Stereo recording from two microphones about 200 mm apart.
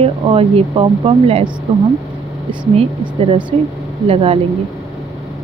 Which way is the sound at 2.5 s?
25° right (ahead or behind).